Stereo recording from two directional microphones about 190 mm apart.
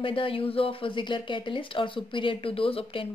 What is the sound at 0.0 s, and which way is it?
Speech, 30° left (ahead or behind).